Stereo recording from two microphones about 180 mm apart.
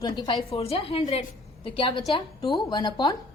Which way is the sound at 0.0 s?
25° left (ahead or behind).